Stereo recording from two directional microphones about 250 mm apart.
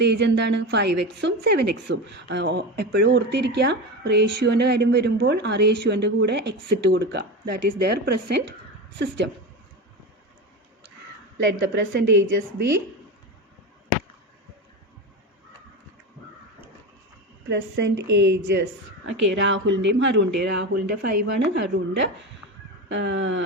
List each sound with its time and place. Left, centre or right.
0.0 s speech: right
11.6 s a woman's voice: right
17.5 s speech: right